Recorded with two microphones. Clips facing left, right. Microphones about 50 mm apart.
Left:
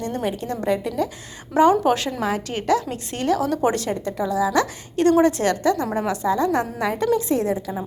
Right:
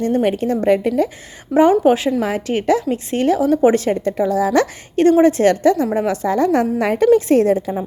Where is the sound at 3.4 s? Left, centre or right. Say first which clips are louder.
Right 7 dB; centre.